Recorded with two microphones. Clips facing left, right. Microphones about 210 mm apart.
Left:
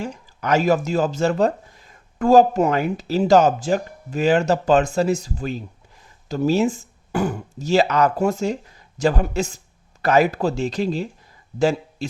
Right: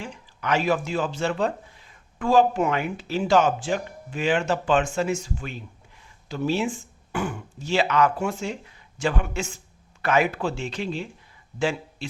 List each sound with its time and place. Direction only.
0.0 s speech: 40° left (ahead or behind)